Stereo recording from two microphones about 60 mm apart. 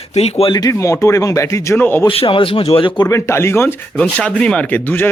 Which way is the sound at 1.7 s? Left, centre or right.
Left.